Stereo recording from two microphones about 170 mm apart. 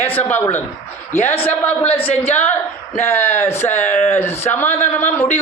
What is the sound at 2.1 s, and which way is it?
Speech, 40° left (ahead or behind).